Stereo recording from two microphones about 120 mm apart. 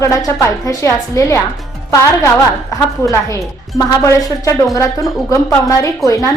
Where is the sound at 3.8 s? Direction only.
30° left (ahead or behind).